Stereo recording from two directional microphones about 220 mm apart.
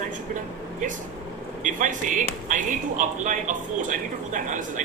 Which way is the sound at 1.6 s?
35° right (ahead or behind).